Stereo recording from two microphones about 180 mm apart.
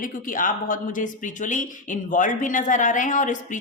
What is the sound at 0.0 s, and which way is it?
Speech, 50° left (ahead or behind).